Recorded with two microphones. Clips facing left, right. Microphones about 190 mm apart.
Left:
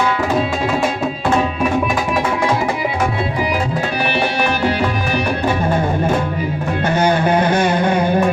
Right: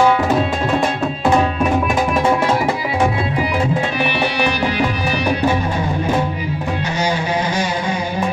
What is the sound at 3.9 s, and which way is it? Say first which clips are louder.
Music: left 1 dB; 45° left (ahead or behind).